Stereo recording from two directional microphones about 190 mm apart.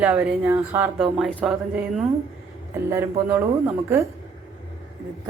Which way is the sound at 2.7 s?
15° right (ahead or behind).